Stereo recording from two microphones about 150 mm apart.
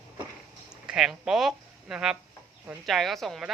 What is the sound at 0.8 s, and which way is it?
Speech, 5° right (ahead or behind).